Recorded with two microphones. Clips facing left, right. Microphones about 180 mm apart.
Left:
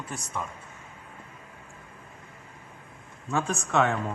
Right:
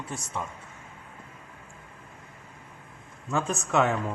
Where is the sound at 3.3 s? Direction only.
Centre (ahead or behind).